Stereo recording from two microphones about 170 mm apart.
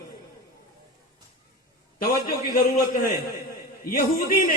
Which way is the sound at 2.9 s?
50° left (ahead or behind).